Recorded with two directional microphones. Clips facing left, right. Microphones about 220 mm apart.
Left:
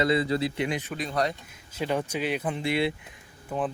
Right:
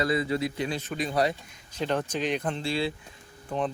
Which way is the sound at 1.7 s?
5° left (ahead or behind).